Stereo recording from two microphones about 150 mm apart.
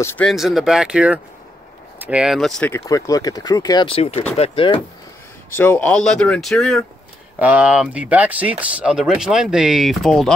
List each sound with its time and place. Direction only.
0.0 s speech: 15° left (ahead or behind)
0.3 s speech: centre (ahead or behind)
2.7 s speech: 25° left (ahead or behind); by 4.8 s 40° left (ahead or behind)
5.6 s speech: 10° left (ahead or behind)
7.3 s speech: 10° right (ahead or behind)